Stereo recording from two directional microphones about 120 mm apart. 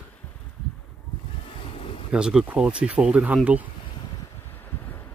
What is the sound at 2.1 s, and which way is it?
Speech, 5° right (ahead or behind).